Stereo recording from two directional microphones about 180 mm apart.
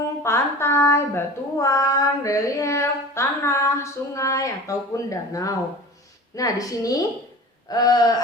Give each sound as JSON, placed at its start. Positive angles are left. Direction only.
{"t": 0.2, "sound": "a woman's voice", "side_deg": 15}